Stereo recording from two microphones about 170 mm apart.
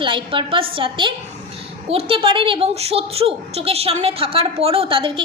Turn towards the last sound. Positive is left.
turn(degrees=-30)  # may be behind; listen again after turning